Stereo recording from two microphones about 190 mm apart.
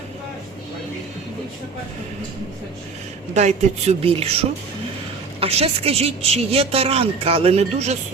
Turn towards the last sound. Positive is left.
turn(degrees=-35)  # may be behind; listen again after turning